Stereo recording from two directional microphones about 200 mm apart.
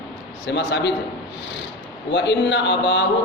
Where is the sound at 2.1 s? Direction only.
60° left (ahead or behind).